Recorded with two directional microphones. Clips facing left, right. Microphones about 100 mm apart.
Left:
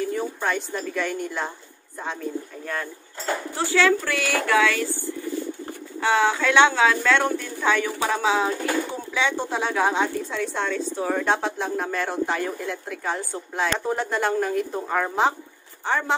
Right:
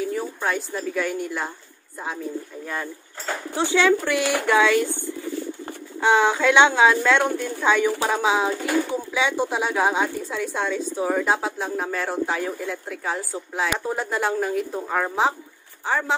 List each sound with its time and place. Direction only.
0.0 s a woman's voice: centre (ahead or behind)
2.6 s speech: 10° right (ahead or behind)
3.5 s speech: 20° right (ahead or behind)
5.9 s a woman's voice: 20° right (ahead or behind); by 16.2 s 5° right (ahead or behind)